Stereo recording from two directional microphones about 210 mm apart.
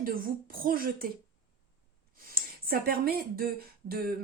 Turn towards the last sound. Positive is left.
turn(degrees=-45)  # may be behind; listen again after turning